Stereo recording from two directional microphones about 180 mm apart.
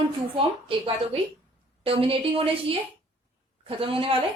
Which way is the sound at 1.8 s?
30° right (ahead or behind).